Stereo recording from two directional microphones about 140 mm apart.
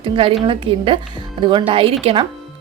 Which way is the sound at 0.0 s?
40° right (ahead or behind).